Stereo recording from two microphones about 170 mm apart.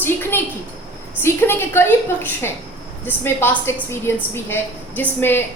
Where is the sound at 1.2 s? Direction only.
15° left (ahead or behind).